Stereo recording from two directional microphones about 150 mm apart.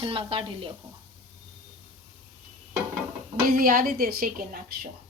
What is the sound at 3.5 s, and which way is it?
A woman's voice, 70° right (ahead or behind).